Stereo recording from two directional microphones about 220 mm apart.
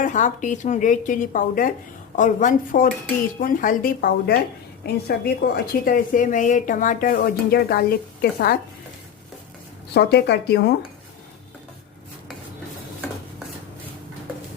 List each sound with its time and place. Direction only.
0.0 s a woman's voice: 35° left (ahead or behind)
9.9 s speech: 50° left (ahead or behind)